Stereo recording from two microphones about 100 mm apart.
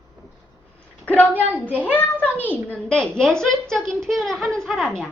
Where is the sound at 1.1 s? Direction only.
15° left (ahead or behind).